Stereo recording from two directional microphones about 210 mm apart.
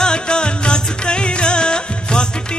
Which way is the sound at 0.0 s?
5° left (ahead or behind).